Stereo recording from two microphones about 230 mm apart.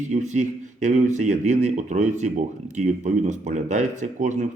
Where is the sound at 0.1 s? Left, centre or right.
Right.